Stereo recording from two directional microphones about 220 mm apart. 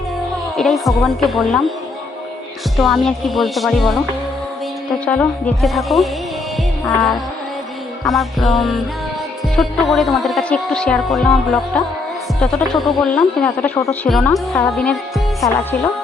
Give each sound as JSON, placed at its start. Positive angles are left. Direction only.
{"t": 0.5, "sound": "speech", "side_deg": 0}
{"t": 2.7, "sound": "speech", "side_deg": 0}
{"t": 5.0, "sound": "speech", "side_deg": 5}